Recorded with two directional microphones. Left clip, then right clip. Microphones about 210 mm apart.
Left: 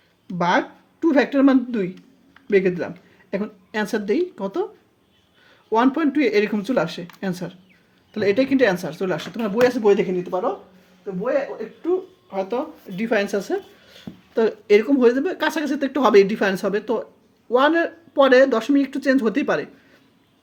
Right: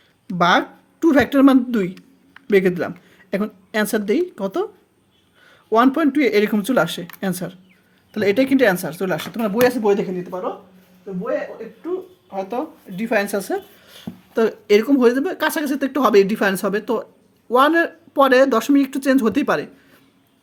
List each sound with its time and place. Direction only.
0.3 s speech: 30° right (ahead or behind)
5.7 s speech: 20° right (ahead or behind)
12.3 s speech: 5° left (ahead or behind); by 19.6 s 20° right (ahead or behind)